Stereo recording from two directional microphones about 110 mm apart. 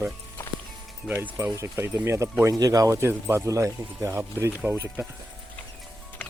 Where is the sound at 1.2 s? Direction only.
20° right (ahead or behind).